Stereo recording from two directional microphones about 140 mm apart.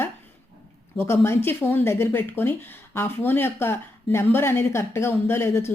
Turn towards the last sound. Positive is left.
turn(degrees=20)  # may be behind; listen again after turning